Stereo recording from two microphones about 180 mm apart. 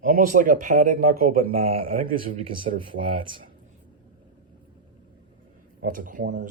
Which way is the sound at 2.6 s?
30° right (ahead or behind).